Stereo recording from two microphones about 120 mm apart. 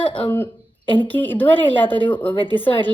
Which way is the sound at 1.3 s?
15° left (ahead or behind).